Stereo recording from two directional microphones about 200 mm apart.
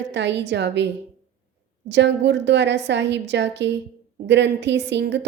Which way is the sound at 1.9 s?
60° right (ahead or behind).